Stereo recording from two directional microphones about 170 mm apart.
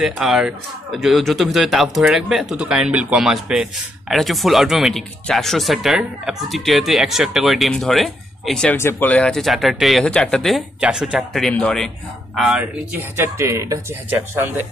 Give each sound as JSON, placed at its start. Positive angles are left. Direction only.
{"t": 0.0, "sound": "speech", "side_deg": 0}
{"t": 8.7, "sound": "speech", "side_deg": 10}
{"t": 13.1, "sound": "speech", "side_deg": -15}